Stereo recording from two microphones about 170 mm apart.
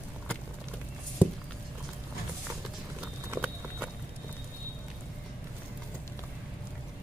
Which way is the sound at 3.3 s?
5° right (ahead or behind).